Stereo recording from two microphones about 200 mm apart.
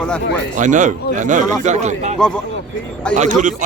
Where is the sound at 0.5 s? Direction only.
40° right (ahead or behind).